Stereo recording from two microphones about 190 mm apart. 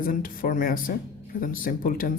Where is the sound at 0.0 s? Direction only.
45° left (ahead or behind).